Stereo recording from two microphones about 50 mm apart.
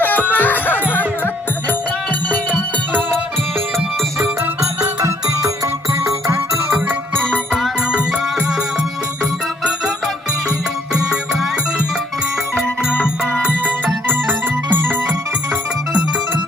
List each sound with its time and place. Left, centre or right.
0.0 s music: left
6.7 s music: right
7.5 s music: centre
13.8 s music: right